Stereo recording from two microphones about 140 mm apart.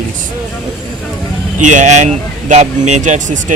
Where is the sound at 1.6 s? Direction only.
60° right (ahead or behind).